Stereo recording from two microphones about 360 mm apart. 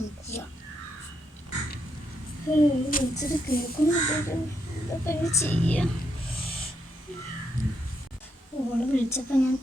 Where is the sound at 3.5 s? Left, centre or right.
Left.